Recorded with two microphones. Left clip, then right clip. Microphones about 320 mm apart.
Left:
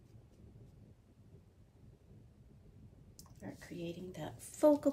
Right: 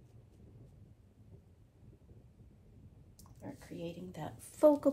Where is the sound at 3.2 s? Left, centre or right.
Centre.